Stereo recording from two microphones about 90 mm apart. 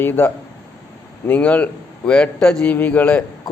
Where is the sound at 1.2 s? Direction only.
15° left (ahead or behind).